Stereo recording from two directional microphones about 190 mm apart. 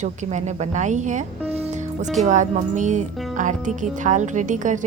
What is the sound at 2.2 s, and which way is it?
A woman's voice, 40° right (ahead or behind).